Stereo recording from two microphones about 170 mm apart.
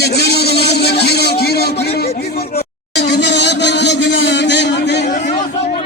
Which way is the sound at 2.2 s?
70° left (ahead or behind).